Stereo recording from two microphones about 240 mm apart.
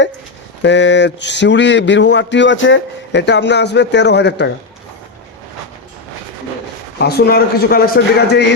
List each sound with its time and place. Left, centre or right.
0.6 s speech: left
7.0 s speech: left